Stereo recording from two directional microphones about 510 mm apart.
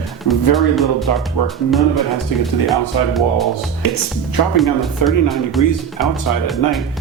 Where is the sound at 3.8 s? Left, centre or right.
Left.